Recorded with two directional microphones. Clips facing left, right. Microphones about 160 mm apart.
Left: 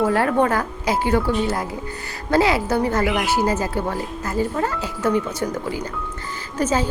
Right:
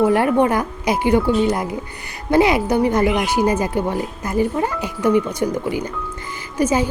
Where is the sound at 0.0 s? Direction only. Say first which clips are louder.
Right 3 dB; 15° right (ahead or behind).